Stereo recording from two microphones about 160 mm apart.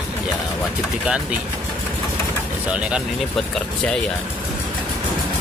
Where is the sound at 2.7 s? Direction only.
5° right (ahead or behind).